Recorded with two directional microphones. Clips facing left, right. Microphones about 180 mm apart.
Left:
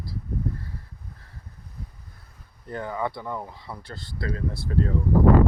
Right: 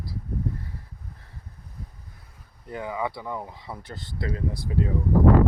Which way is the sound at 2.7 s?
10° right (ahead or behind).